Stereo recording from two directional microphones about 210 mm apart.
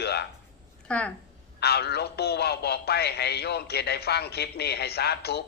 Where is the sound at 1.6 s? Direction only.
50° left (ahead or behind).